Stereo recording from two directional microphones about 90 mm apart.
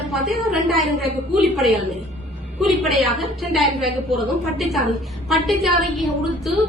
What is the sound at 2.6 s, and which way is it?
A woman's voice, centre (ahead or behind).